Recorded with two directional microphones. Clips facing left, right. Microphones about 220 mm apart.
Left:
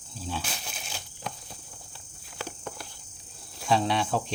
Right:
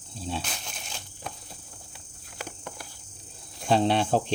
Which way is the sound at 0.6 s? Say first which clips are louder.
Left 1 dB; 5° left (ahead or behind).